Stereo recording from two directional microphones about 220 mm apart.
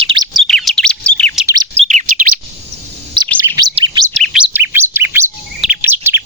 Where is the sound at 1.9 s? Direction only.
35° right (ahead or behind).